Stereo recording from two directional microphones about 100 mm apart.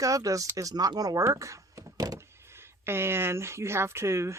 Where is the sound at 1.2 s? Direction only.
35° right (ahead or behind).